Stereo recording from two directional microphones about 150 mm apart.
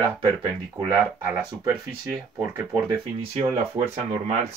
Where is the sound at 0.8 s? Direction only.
15° right (ahead or behind).